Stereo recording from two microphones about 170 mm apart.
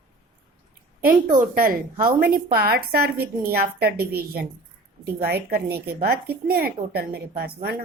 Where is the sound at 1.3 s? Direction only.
55° right (ahead or behind).